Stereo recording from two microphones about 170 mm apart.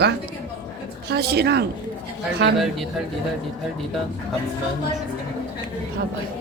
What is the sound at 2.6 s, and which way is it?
Speech, centre (ahead or behind).